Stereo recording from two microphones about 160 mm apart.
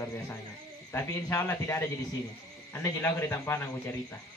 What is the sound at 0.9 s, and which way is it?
A man's voice, 15° left (ahead or behind).